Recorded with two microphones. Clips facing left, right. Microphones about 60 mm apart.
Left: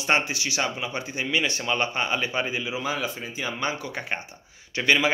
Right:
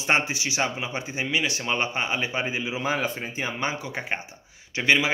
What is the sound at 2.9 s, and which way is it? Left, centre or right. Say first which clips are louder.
Speech: right 2 dB; right.